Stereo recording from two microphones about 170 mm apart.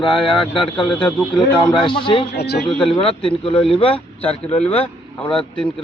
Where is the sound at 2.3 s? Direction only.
75° left (ahead or behind).